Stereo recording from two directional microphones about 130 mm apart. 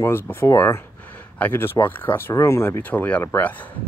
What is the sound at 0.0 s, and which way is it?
Speech, 15° left (ahead or behind).